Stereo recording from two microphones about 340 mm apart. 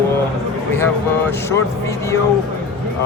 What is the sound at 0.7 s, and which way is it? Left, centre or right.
Speech, centre.